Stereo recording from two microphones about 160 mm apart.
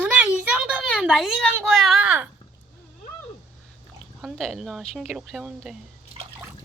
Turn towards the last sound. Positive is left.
turn(degrees=-5)  # may be behind; listen again after turning